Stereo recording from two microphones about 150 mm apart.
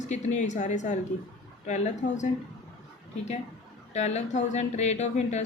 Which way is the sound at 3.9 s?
50° left (ahead or behind).